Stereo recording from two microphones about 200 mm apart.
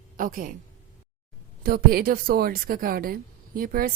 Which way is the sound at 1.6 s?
50° right (ahead or behind).